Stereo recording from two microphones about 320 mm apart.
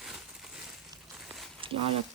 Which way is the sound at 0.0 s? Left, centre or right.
Centre.